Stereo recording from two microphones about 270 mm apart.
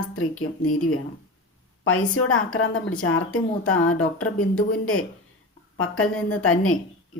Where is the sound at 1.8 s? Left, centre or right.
Left.